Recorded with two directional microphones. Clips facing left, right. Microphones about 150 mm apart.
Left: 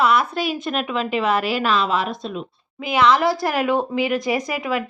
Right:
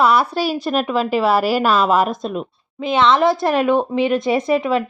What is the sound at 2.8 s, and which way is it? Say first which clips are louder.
Speech: right 2 dB; 25° right (ahead or behind).